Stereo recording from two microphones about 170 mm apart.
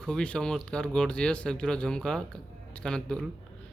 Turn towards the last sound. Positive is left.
turn(degrees=5)  # may be behind; listen again after turning